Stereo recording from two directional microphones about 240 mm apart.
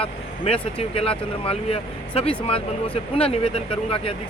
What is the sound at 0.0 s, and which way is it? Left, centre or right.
Speech, left.